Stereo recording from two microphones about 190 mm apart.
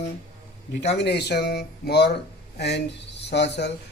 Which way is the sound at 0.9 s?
60° left (ahead or behind).